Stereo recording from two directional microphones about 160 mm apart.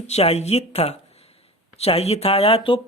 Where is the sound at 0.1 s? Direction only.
40° left (ahead or behind).